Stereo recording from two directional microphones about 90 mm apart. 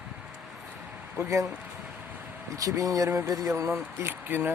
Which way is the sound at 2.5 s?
40° right (ahead or behind).